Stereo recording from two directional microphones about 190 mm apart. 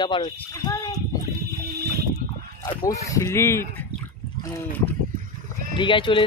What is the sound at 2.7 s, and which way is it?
Speech, 15° left (ahead or behind).